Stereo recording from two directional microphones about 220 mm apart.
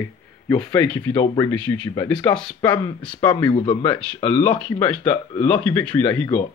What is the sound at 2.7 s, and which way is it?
Speech, 20° left (ahead or behind).